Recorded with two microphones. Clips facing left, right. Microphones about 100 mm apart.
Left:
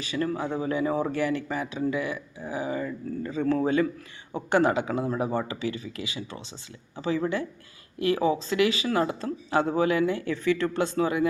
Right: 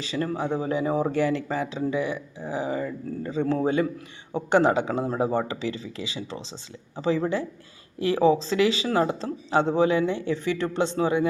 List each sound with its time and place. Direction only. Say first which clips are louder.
0.0 s speech: right 1 dB; 30° right (ahead or behind)